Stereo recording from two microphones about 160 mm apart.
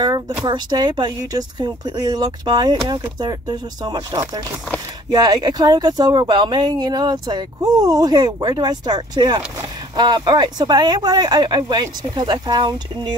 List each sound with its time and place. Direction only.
0.5 s speech: 25° right (ahead or behind)